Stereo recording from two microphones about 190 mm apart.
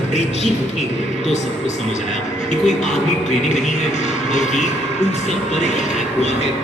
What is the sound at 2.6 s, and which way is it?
Speech, 40° left (ahead or behind).